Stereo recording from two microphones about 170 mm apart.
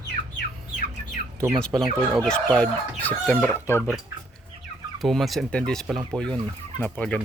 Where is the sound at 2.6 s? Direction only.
10° left (ahead or behind).